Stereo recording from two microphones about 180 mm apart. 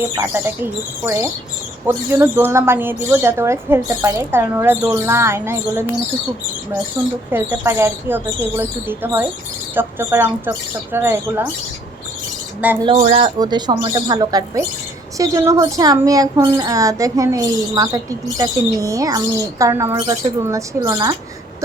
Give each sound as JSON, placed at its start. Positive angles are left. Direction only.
{"t": 0.2, "sound": "a woman's voice", "side_deg": -10}
{"t": 7.3, "sound": "a woman's voice", "side_deg": -10}
{"t": 12.8, "sound": "a woman's voice", "side_deg": -35}